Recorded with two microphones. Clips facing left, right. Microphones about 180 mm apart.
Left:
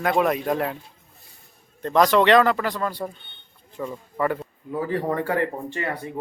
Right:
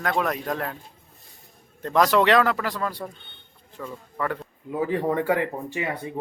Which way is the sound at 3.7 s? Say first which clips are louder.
Left 4 dB; 15° left (ahead or behind).